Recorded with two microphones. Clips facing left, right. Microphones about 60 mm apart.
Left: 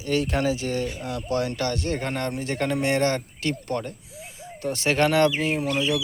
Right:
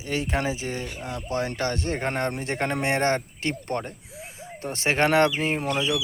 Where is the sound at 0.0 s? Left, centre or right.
Right.